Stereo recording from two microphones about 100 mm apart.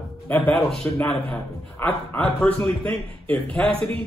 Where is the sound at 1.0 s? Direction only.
20° left (ahead or behind).